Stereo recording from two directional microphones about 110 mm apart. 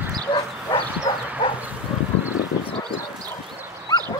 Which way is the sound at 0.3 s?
50° left (ahead or behind).